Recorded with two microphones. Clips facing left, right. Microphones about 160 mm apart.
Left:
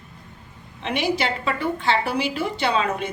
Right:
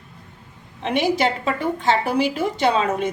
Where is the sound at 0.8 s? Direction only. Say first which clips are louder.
Right 4 dB; 45° right (ahead or behind).